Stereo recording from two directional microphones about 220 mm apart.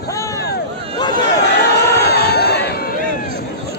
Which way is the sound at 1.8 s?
45° left (ahead or behind).